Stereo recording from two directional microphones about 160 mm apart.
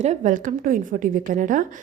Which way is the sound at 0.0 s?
45° right (ahead or behind).